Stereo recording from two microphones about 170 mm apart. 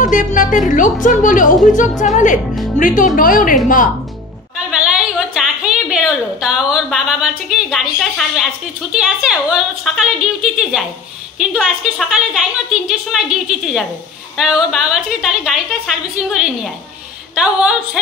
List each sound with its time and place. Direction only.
0.0 s a woman's voice: 50° left (ahead or behind)
4.6 s a woman's voice: 5° right (ahead or behind)